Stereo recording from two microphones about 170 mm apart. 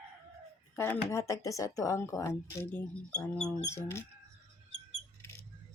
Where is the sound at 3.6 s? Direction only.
15° left (ahead or behind).